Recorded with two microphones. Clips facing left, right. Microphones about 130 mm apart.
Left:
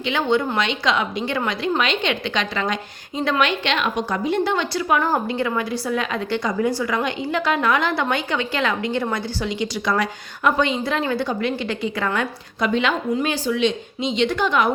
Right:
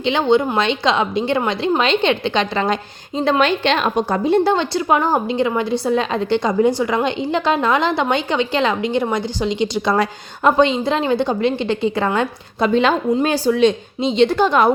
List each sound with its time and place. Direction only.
0.0 s a woman's voice: 25° right (ahead or behind)